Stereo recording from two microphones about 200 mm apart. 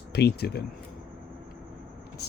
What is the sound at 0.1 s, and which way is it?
Speech, 55° left (ahead or behind).